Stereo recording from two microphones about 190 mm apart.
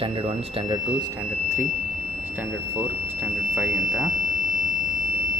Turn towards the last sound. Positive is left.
turn(degrees=0)  # may be behind; listen again after turning